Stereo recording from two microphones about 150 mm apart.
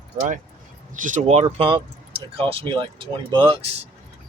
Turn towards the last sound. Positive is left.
turn(degrees=-35)  # may be behind; listen again after turning